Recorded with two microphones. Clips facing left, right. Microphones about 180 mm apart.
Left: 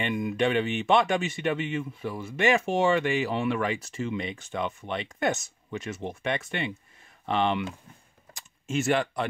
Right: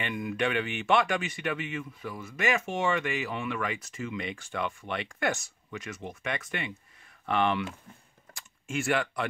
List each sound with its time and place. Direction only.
0.0 s speech: 25° left (ahead or behind)
8.3 s computer keyboard: 20° left (ahead or behind)